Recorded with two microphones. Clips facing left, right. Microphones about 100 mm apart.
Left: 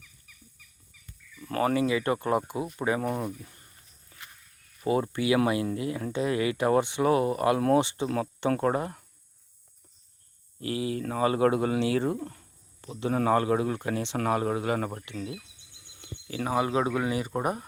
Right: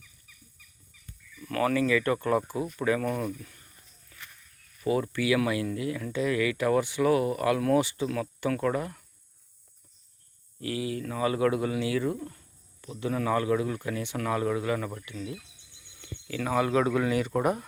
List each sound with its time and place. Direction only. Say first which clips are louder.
1.4 s speech: left 1 dB; 30° left (ahead or behind)
4.1 s a sound: even; 25° left (ahead or behind)
4.8 s speech: left 1 dB; 30° left (ahead or behind)
8.0 s speech: left 2 dB; 35° left (ahead or behind)
10.6 s speech: left 1 dB; 30° left (ahead or behind)
13.7 s speech: left 3 dB; 30° left (ahead or behind)
16.2 s speech: even; 25° left (ahead or behind)